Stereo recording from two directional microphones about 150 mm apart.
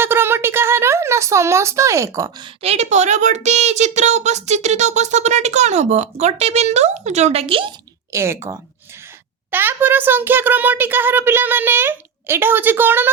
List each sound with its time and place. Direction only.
0.0 s a woman's voice: 15° right (ahead or behind)
2.6 s a woman's voice: 45° right (ahead or behind)
8.1 s a child's voice: 20° right (ahead or behind)